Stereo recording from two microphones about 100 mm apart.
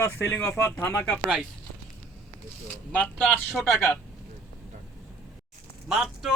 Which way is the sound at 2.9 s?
15° left (ahead or behind).